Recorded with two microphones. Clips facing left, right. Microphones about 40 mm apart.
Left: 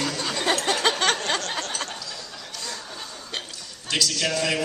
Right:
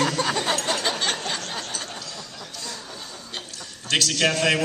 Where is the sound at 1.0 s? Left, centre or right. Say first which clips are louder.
Left 4 dB; left.